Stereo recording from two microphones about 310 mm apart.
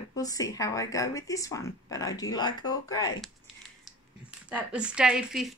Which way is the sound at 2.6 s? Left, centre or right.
Left.